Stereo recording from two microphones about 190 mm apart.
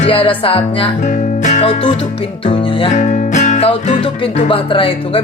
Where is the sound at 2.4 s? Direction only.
30° left (ahead or behind).